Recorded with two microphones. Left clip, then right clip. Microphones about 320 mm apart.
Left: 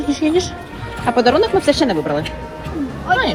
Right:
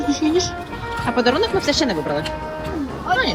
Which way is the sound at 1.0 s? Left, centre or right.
Centre.